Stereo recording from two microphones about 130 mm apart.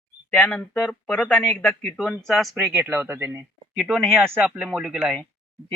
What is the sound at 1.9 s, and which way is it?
Speech, centre (ahead or behind).